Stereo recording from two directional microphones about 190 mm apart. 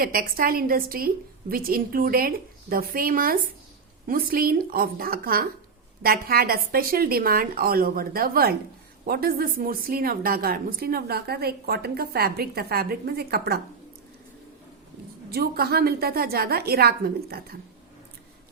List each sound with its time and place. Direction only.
0.0 s a woman's voice: 50° right (ahead or behind)
15.3 s a woman's voice: 55° right (ahead or behind)